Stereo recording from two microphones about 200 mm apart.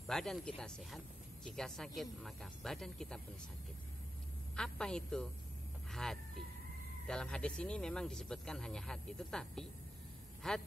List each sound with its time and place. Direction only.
0.0 s speech: centre (ahead or behind)
4.6 s speech: 5° left (ahead or behind)